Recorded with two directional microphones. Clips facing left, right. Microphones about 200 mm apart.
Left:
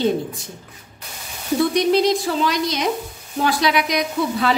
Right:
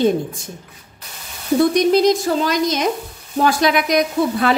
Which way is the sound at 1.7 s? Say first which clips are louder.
Right 3 dB; 45° right (ahead or behind).